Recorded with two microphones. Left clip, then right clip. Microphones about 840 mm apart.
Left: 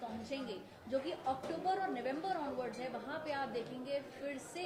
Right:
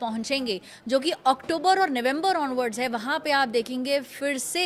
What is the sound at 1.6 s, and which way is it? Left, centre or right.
A woman's voice, right.